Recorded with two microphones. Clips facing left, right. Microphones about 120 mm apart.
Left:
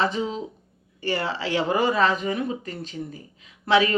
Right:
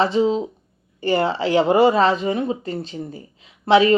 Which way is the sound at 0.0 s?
30° right (ahead or behind).